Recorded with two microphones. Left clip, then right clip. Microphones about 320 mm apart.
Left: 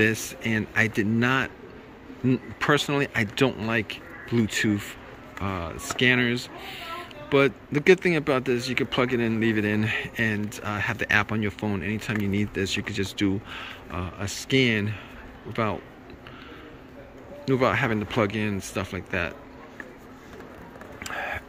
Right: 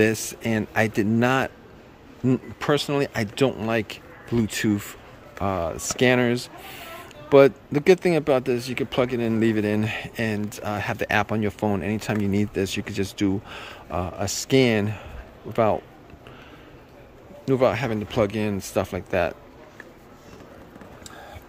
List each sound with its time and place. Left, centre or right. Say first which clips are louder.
0.0 s speech: right 2 dB; centre
17.5 s speech: right 2 dB; centre
21.1 s a sound: left 14 dB; centre